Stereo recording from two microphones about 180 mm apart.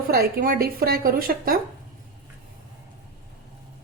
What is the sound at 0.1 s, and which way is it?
A woman's voice, 55° right (ahead or behind).